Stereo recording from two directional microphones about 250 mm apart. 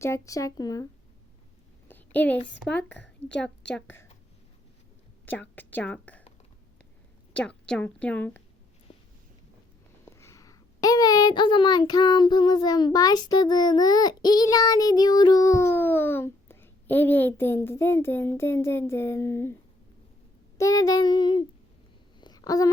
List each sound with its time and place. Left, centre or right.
0.0 s a child's voice: centre
1.9 s a sound: centre
2.5 s a woman's voice: centre
2.9 s speech: left
5.2 s a woman's voice: centre
7.3 s a woman's voice: centre
8.9 s a sound: left
10.1 s a child's voice: centre
20.6 s a child's voice: centre
22.2 s a sound: centre